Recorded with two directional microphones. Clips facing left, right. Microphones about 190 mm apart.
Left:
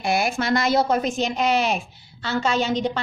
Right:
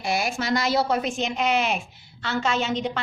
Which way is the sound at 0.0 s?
55° left (ahead or behind).